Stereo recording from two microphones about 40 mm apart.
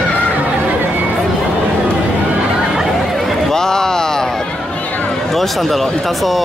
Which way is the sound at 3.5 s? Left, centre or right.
Centre.